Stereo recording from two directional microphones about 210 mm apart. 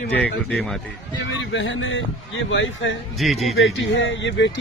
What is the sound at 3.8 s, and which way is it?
Speech, 60° left (ahead or behind).